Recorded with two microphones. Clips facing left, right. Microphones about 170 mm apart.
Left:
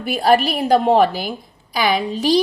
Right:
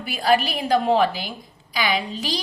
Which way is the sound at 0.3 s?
50° left (ahead or behind).